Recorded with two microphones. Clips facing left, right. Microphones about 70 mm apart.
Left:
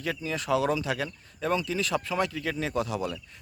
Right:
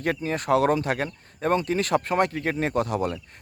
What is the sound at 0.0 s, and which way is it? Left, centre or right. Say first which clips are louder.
Speech: right 5 dB; right.